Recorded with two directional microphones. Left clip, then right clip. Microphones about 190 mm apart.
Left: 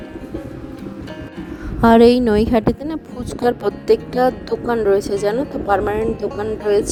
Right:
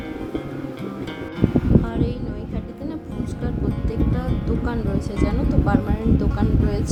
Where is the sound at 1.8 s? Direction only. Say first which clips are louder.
Left 17 dB; 60° left (ahead or behind).